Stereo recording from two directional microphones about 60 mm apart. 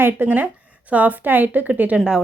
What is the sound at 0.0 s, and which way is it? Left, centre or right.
A woman's voice, right.